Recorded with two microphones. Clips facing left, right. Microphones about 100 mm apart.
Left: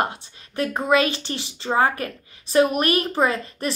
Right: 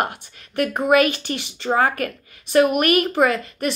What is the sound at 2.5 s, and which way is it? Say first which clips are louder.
A woman's voice: right 2 dB; 30° left (ahead or behind).